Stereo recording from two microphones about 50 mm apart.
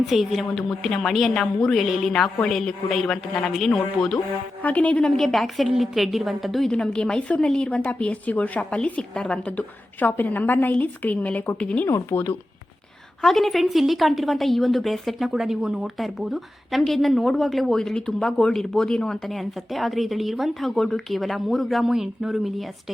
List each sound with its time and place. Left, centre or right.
0.0 s speech: centre
0.7 s a woman's voice: centre
4.6 s speech: left
5.0 s speech: centre
6.7 s speech: centre
9.5 s a woman's voice: left
12.1 s speech: left
13.2 s speech: centre
21.8 s speech: centre